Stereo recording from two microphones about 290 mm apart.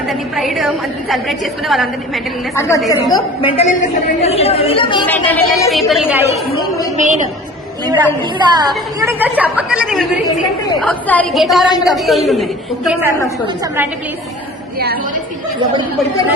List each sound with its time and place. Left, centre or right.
0.1 s a woman's voice: centre
2.6 s a woman's voice: centre
5.0 s speech: centre
5.9 s a woman's voice: centre
6.9 s a woman's voice: right
7.9 s a woman's voice: centre